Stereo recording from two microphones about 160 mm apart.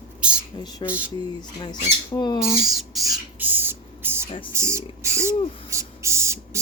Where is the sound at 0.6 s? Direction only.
25° left (ahead or behind).